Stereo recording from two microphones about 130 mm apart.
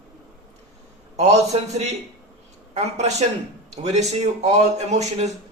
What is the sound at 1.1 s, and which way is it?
Speech, 55° right (ahead or behind).